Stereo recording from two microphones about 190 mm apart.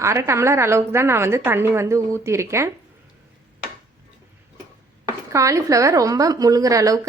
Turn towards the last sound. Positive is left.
turn(degrees=-20)  # may be behind; listen again after turning